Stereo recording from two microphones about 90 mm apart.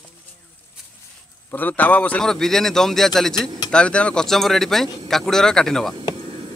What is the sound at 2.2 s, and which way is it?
Speech, 5° left (ahead or behind).